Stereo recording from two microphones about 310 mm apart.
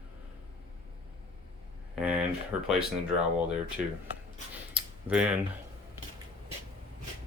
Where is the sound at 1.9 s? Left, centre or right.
Centre.